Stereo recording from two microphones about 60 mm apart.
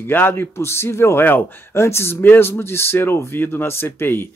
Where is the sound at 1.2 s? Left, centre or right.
Left.